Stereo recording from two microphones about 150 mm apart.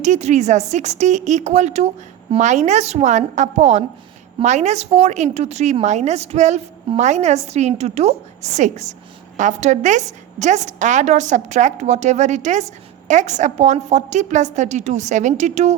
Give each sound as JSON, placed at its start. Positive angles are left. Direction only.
{"t": 0.0, "sound": "a woman's voice", "side_deg": -50}